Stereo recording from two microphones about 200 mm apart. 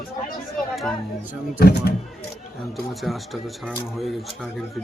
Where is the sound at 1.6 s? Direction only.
50° left (ahead or behind).